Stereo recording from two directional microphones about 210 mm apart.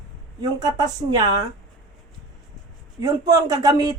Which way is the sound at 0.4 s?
20° right (ahead or behind).